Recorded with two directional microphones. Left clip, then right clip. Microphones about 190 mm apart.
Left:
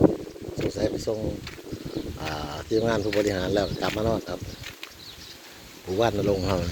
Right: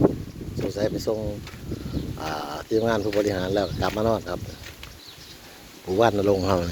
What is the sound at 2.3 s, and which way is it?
Speech, 15° right (ahead or behind).